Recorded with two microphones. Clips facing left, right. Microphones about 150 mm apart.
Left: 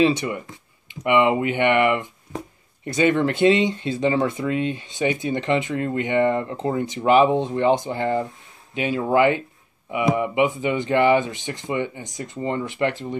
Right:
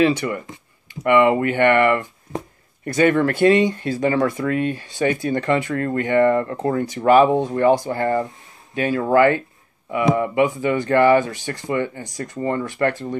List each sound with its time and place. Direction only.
0.0 s speech: 20° left (ahead or behind)